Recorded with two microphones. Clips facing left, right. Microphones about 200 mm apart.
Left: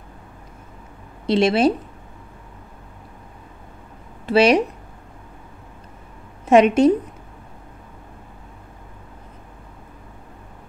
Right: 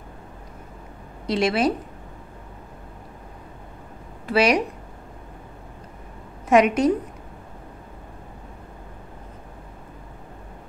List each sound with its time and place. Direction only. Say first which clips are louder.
1.2 s speech: left 5 dB; 25° left (ahead or behind)
4.3 s speech: left 4 dB; 25° left (ahead or behind)
6.5 s speech: left 4 dB; 25° left (ahead or behind)